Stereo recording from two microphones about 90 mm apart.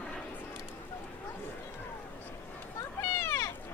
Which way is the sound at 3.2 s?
35° left (ahead or behind).